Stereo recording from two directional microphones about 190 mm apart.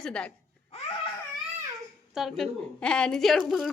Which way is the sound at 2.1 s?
Centre (ahead or behind).